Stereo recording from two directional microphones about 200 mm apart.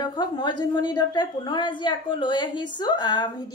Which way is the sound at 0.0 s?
20° left (ahead or behind).